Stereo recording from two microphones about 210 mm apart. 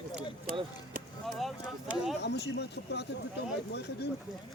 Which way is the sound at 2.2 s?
50° left (ahead or behind).